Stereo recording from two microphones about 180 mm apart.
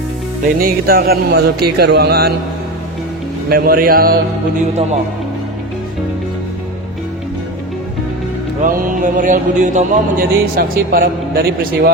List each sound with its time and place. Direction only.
0.6 s mantra: 55° right (ahead or behind)
3.5 s mantra: 55° right (ahead or behind)
4.7 s speech: 35° right (ahead or behind)
8.6 s speech: 50° right (ahead or behind)
10.5 s mantra: 60° right (ahead or behind)